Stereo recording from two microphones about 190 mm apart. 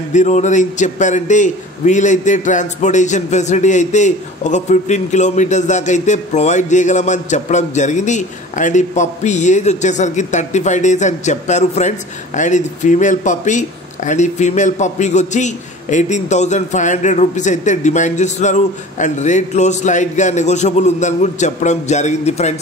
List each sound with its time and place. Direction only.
0.1 s a man's voice: 40° left (ahead or behind)